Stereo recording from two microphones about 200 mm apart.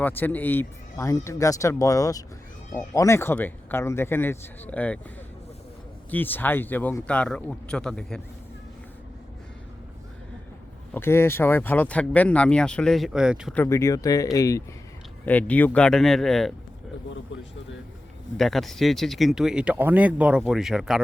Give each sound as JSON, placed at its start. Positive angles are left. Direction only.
{"t": 0.0, "sound": "speech", "side_deg": 10}
{"t": 6.1, "sound": "speech", "side_deg": 10}
{"t": 10.9, "sound": "speech", "side_deg": 10}
{"t": 13.5, "sound": "speech", "side_deg": 10}
{"t": 18.3, "sound": "speech", "side_deg": 0}